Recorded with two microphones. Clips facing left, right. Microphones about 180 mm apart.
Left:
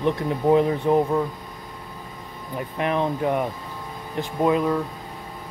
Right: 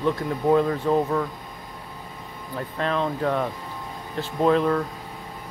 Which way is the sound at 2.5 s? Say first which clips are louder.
Left 2 dB; 15° left (ahead or behind).